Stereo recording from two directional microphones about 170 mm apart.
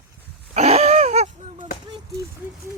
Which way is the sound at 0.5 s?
40° right (ahead or behind).